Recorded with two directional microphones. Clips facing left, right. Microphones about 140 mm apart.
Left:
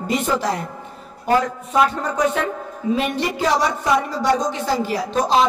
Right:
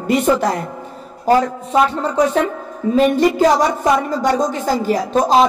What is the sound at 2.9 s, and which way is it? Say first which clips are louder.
A woman's voice: right 11 dB; 45° right (ahead or behind).